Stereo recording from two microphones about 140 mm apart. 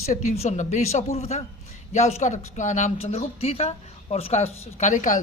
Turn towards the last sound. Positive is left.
turn(degrees=65)  # may be behind; listen again after turning